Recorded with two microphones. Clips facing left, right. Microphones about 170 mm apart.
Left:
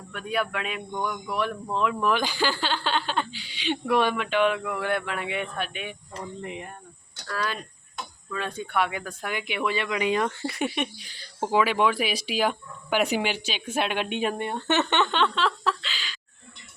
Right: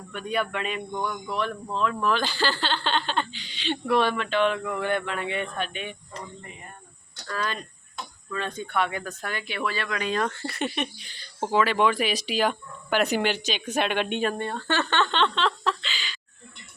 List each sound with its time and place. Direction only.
0.1 s speech: 5° left (ahead or behind)
6.4 s speech: 90° left
7.3 s speech: 5° left (ahead or behind)